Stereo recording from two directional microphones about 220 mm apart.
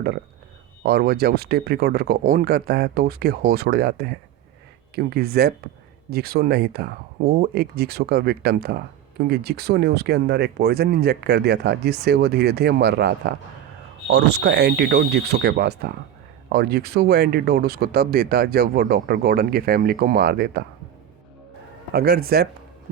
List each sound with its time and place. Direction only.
0.8 s speech: 45° right (ahead or behind)
21.9 s speech: 45° right (ahead or behind)